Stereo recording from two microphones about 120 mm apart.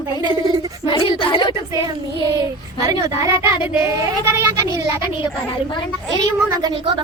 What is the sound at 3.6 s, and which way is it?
Speech, 40° left (ahead or behind).